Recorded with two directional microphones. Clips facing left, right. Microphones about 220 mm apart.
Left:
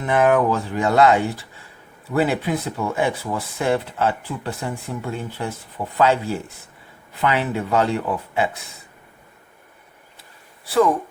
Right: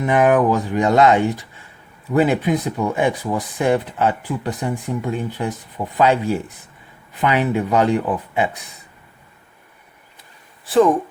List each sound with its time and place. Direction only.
0.0 s speech: 15° right (ahead or behind)